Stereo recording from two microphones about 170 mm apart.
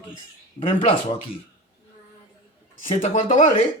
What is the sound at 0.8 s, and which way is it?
Speech, 35° left (ahead or behind).